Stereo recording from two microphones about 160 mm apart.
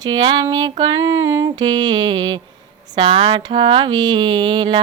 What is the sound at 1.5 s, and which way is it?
Mantra, 25° right (ahead or behind).